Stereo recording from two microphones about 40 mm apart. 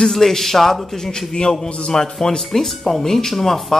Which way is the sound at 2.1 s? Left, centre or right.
Centre.